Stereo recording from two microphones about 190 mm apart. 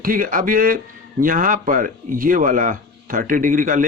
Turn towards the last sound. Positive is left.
turn(degrees=-45)  # may be behind; listen again after turning